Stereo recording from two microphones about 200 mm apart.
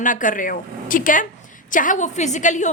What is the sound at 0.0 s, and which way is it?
A woman's voice, 40° left (ahead or behind).